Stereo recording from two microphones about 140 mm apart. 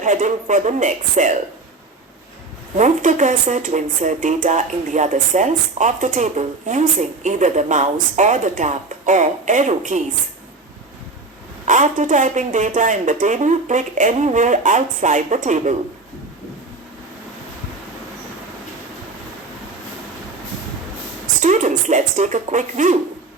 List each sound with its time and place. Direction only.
0.0 s speech: 65° right (ahead or behind)
2.7 s speech: 60° right (ahead or behind)
11.6 s speech: 60° right (ahead or behind)
21.4 s speech: 60° right (ahead or behind)